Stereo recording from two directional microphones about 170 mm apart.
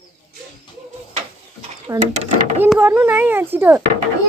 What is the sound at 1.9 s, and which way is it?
Speech, 15° right (ahead or behind).